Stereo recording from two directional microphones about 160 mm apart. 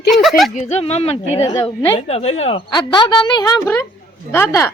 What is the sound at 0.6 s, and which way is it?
A woman's voice, 45° left (ahead or behind).